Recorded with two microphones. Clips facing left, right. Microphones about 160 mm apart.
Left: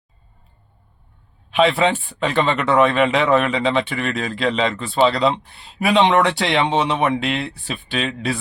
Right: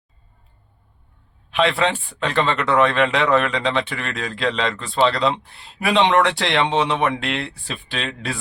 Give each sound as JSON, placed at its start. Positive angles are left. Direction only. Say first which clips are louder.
{"t": 1.5, "sound": "speech", "louder": "left 3 dB", "side_deg": 5}